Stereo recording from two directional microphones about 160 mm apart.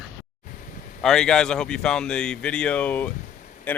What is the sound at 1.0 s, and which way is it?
Speech, 5° left (ahead or behind).